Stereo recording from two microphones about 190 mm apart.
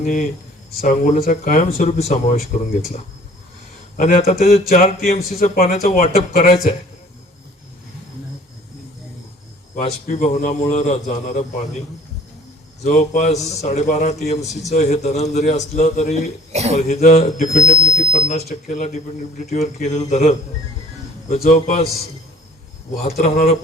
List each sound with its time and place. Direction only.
0.0 s a man's voice: 40° left (ahead or behind)
3.9 s a man's voice: 45° left (ahead or behind)
9.7 s a man's voice: 35° left (ahead or behind)
12.8 s a man's voice: 35° left (ahead or behind)
16.5 s speech: 35° right (ahead or behind)
16.7 s a man's voice: 35° left (ahead or behind)
17.7 s a sound: 35° left (ahead or behind)
18.4 s a man's voice: 45° left (ahead or behind)
21.5 s a man's voice: 35° left (ahead or behind)
23.2 s a man's voice: 35° left (ahead or behind)